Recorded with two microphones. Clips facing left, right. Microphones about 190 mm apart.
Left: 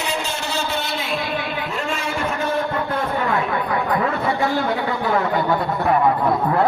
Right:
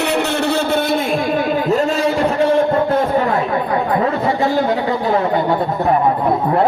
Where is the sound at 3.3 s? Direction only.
30° right (ahead or behind).